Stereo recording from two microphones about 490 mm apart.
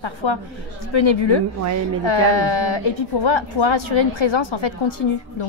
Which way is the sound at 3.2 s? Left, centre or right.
Left.